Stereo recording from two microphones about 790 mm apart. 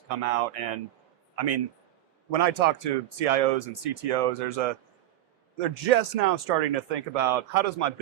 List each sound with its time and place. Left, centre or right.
0.1 s speech: right